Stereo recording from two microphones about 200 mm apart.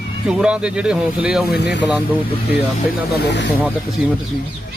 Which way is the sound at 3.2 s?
60° left (ahead or behind).